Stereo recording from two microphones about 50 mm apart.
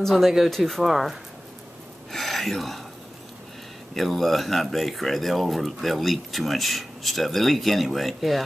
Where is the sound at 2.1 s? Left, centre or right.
Centre.